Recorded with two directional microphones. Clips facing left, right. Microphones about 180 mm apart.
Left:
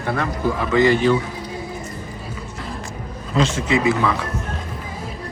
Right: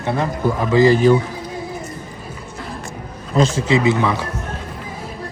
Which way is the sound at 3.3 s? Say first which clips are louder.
Right 3 dB; 35° right (ahead or behind).